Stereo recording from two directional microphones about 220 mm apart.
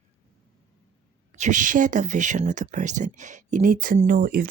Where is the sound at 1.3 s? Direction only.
35° right (ahead or behind).